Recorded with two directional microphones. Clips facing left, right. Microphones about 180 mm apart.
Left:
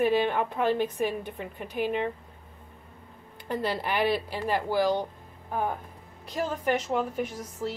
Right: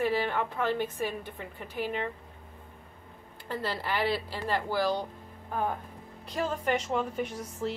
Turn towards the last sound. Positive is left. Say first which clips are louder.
# left 1 dB
turn(degrees=5)  # may be behind; listen again after turning